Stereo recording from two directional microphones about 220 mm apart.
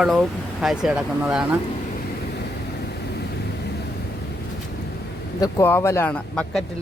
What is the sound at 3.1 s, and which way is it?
Vehicle, 50° left (ahead or behind).